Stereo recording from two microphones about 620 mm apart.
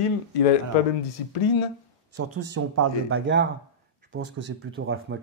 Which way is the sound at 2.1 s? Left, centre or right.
Right.